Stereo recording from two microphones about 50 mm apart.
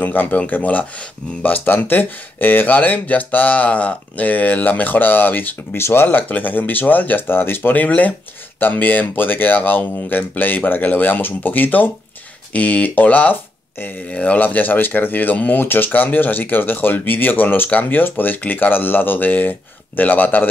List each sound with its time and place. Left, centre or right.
0.0 s speech: left
5.8 s speech: left
6.0 s speech: left
14.1 s speech: left